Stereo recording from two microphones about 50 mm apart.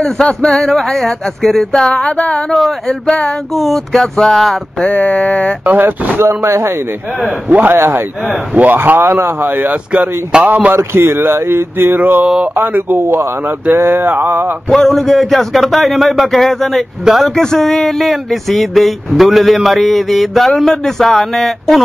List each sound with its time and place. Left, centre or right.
0.4 s a sound: centre
1.7 s a sound: centre
3.5 s speech: centre
4.0 s a sound: centre
4.8 s a sound: left
5.7 s speech: right
6.2 s speech: right
7.7 s speech: right
8.5 s speech: right
9.5 s speech: right
10.7 s speech: right
13.0 s speech: right
14.7 s speech: centre
17.4 s speech: centre